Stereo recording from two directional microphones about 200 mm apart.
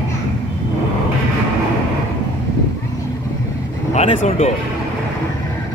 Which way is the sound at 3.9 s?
35° left (ahead or behind).